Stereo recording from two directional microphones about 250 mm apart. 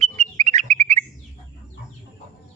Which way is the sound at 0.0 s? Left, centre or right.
Right.